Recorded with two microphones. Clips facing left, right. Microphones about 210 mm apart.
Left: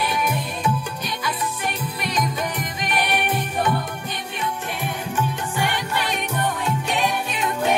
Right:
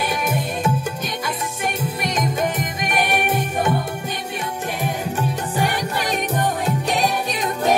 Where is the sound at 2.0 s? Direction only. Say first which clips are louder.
Right 3 dB; 45° right (ahead or behind).